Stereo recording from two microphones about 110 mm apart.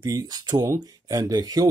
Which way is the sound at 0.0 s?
35° right (ahead or behind).